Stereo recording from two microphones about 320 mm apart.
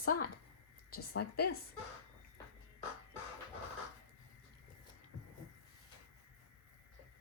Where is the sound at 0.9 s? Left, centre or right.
Left.